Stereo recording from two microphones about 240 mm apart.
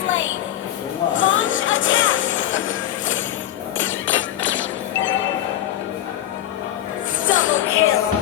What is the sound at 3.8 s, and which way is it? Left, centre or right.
Music, left.